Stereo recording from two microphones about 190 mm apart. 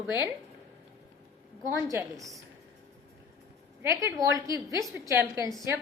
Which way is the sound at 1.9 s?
15° right (ahead or behind).